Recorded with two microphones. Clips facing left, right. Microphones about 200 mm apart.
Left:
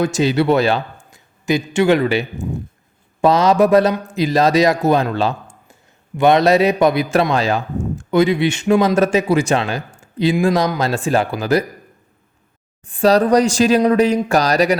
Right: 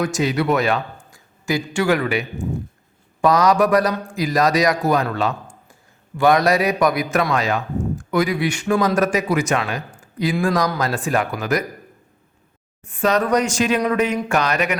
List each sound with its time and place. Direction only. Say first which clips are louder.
0.0 s a man's voice: left 4 dB; 30° left (ahead or behind)
12.8 s speech: left 5 dB; 30° left (ahead or behind)